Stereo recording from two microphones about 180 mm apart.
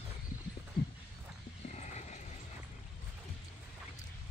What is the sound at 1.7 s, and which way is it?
Vehicle, 40° left (ahead or behind).